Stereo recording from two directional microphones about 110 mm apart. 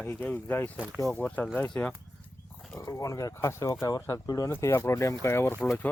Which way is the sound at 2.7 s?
30° left (ahead or behind).